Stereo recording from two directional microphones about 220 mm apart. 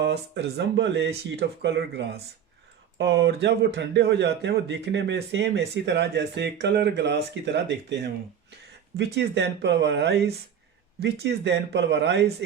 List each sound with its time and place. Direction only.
0.0 s a man's voice: 50° right (ahead or behind)